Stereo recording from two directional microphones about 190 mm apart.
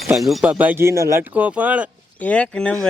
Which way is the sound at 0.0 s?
Centre (ahead or behind).